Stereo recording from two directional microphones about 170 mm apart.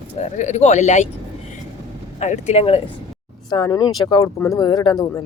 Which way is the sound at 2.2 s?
45° left (ahead or behind).